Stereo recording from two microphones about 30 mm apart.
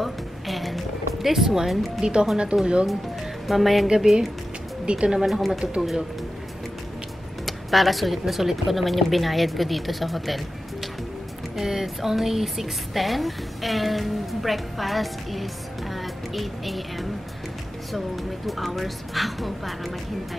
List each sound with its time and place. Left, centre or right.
0.0 s music: centre
2.0 s speech: right
3.4 s speech: centre
3.8 s speech: centre
4.8 s speech: right
5.2 s speech: centre
7.4 s speech: centre